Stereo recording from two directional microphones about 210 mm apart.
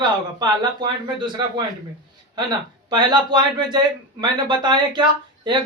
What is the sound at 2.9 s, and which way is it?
Speech, 20° right (ahead or behind).